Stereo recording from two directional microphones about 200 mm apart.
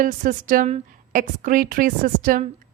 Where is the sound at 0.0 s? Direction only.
40° right (ahead or behind).